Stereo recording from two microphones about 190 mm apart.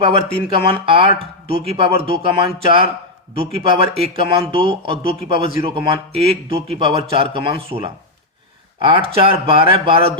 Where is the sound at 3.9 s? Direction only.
30° right (ahead or behind).